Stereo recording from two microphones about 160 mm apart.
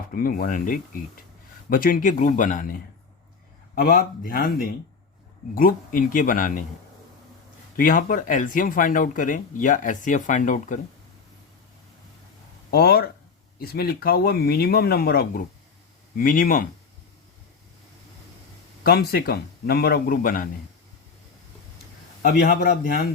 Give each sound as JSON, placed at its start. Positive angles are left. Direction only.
{"t": 0.1, "sound": "speech", "side_deg": 60}
{"t": 3.8, "sound": "speech", "side_deg": 70}
{"t": 7.8, "sound": "speech", "side_deg": 55}
{"t": 12.7, "sound": "speech", "side_deg": 75}
{"t": 18.8, "sound": "speech", "side_deg": 80}
{"t": 22.2, "sound": "speech", "side_deg": 60}